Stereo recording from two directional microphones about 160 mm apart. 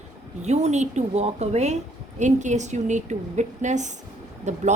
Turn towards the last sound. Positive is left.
turn(degrees=-45)  # may be behind; listen again after turning